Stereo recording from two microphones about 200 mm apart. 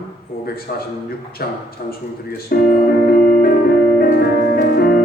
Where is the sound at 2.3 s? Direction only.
45° left (ahead or behind).